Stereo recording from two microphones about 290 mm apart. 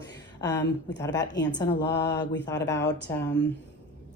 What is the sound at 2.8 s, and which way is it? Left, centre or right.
Speech, left.